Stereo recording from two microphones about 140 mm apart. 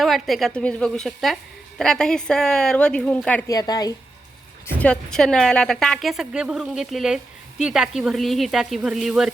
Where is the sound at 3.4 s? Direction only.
25° left (ahead or behind).